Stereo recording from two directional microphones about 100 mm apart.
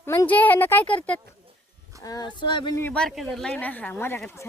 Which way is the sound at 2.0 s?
45° left (ahead or behind).